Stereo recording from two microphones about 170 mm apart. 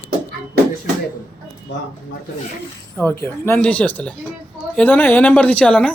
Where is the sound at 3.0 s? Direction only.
10° left (ahead or behind).